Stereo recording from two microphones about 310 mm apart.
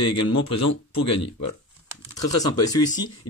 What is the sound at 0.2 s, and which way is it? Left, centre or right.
Speech, left.